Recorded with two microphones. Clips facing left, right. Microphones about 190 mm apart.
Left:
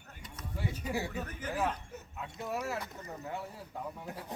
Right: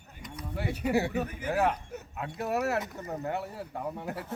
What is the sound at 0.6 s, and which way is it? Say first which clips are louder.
Speech: right 8 dB; 65° right (ahead or behind).